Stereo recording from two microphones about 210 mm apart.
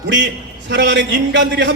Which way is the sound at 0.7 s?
55° right (ahead or behind).